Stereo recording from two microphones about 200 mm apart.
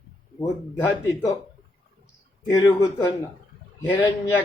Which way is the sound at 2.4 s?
15° left (ahead or behind).